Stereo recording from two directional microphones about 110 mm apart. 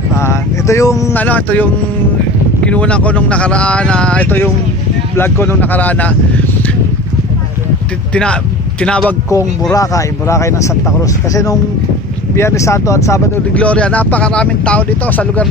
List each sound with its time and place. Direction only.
0.1 s speech: 25° left (ahead or behind)
1.1 s speech: 15° left (ahead or behind)
8.1 s speech: 10° left (ahead or behind)
9.3 s speech: 30° left (ahead or behind)
13.6 s speech: 10° left (ahead or behind)